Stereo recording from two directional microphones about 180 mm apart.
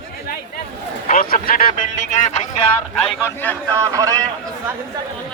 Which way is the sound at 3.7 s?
20° right (ahead or behind).